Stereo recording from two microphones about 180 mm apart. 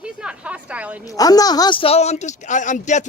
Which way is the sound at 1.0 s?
20° left (ahead or behind).